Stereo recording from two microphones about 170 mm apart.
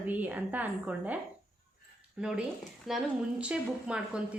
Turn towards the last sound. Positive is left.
turn(degrees=-5)  # may be behind; listen again after turning